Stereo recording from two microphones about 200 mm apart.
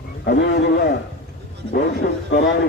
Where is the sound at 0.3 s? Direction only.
55° left (ahead or behind).